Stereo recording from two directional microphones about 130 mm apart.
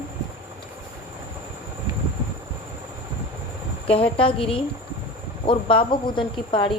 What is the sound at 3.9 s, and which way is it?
A woman's voice, 45° left (ahead or behind).